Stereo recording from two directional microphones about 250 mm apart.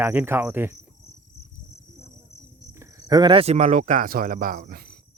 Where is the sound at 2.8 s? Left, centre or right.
Centre.